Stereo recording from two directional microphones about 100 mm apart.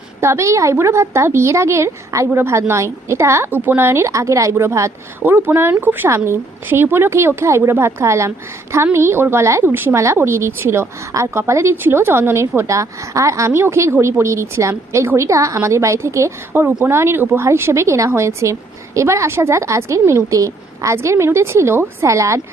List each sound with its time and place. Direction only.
0.2 s a woman's voice: 30° right (ahead or behind)